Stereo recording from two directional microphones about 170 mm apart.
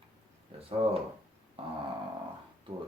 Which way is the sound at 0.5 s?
35° right (ahead or behind).